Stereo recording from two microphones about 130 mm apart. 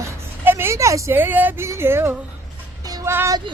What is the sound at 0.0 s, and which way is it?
Vehicle, 20° right (ahead or behind).